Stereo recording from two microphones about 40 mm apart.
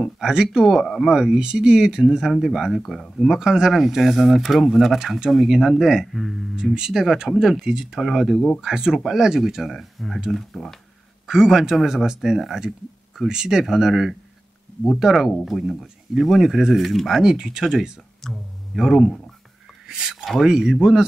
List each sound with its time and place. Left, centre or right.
0.0 s speech: centre
0.7 s speech: centre
1.4 s speech: right; by 3.3 s centre
3.3 s speech: centre
6.1 s speech: centre
6.5 s speech: centre
11.2 s speech: centre
15.1 s speech: centre
17.2 s speech: centre
18.2 s speech: centre
18.8 s speech: centre